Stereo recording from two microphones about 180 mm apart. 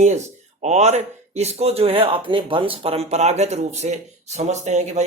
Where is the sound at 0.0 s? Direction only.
40° right (ahead or behind).